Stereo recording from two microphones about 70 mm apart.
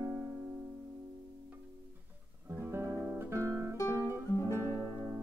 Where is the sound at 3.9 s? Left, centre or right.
Right.